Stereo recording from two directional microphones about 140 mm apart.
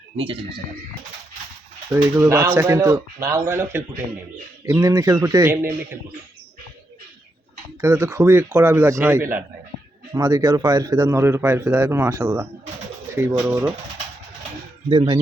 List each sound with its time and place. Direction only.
0.2 s speech: 40° right (ahead or behind)
1.9 s speech: 15° right (ahead or behind)
7.8 s a man's voice: 20° right (ahead or behind)
14.8 s speech: 40° right (ahead or behind)